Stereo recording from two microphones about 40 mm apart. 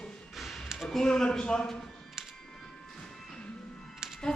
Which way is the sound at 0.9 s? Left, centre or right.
Centre.